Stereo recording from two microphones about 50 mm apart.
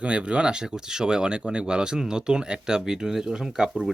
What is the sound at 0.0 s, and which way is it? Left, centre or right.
Speech, right.